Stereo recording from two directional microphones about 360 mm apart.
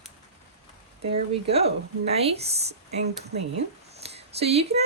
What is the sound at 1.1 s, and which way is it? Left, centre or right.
Speech, centre.